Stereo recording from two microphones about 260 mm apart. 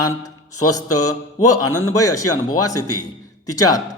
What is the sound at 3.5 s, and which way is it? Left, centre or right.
Mantra, centre.